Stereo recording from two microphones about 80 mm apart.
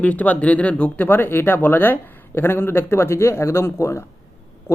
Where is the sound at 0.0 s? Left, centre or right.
Centre.